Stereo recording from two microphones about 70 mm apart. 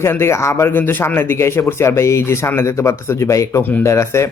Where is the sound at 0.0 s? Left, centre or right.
Left.